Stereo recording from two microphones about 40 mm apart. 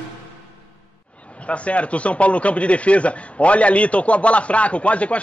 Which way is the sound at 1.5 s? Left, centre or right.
Left.